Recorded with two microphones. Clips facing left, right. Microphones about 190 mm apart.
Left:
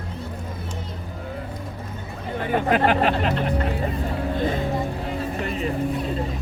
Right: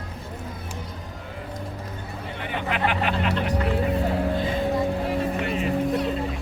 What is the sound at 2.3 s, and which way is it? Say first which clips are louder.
Speech: left 8 dB; 45° left (ahead or behind).